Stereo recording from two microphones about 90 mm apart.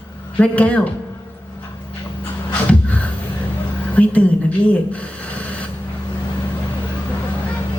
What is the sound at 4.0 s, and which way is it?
Speech, 15° left (ahead or behind).